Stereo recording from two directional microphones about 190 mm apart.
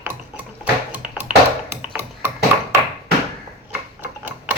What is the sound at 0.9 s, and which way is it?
Tap, 10° right (ahead or behind).